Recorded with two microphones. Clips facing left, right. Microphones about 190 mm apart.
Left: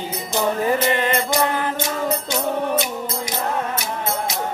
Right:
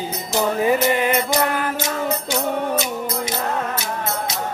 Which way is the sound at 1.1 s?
20° left (ahead or behind).